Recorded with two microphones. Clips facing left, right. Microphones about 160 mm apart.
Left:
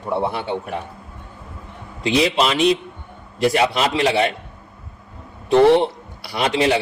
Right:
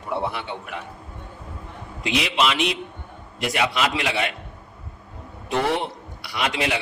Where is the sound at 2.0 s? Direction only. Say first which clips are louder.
Left 5 dB; 35° left (ahead or behind).